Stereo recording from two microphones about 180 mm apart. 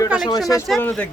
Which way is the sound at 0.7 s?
5° left (ahead or behind).